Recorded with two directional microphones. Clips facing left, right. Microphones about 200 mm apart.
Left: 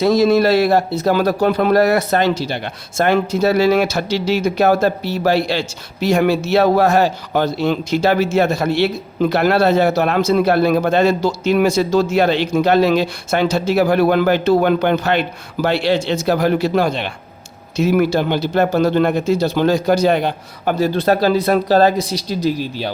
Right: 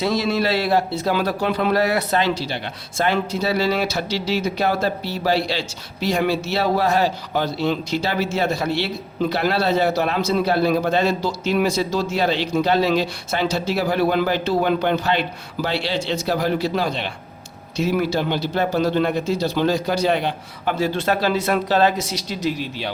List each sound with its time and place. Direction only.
0.0 s speech: 40° left (ahead or behind)